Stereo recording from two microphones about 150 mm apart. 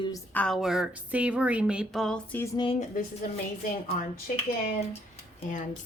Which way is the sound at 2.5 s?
35° left (ahead or behind).